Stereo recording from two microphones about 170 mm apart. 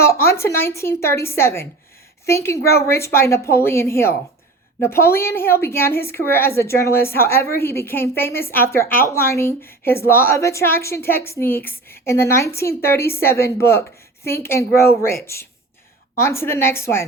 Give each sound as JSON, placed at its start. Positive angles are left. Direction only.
{"t": 0.0, "sound": "a woman's voice", "side_deg": 15}